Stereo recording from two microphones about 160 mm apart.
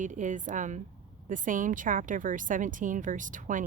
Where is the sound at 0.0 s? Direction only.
50° right (ahead or behind).